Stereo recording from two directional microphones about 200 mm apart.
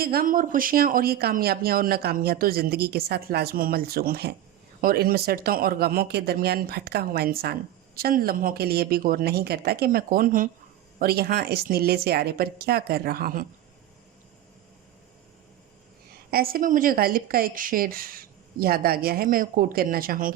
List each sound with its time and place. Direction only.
0.0 s speech: 50° right (ahead or behind)
16.3 s speech: 50° right (ahead or behind)